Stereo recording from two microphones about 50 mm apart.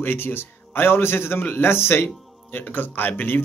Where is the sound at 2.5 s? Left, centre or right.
Left.